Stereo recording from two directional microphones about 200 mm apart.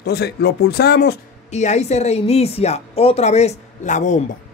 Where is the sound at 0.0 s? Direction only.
55° left (ahead or behind).